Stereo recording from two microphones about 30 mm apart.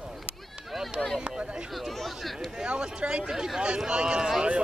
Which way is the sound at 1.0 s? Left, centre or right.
Left.